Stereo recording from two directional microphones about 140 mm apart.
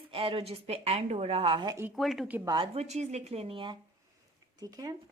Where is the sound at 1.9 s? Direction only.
Centre (ahead or behind).